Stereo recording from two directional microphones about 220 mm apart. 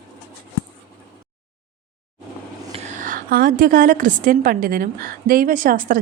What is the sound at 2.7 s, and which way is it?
A woman's voice, 30° right (ahead or behind).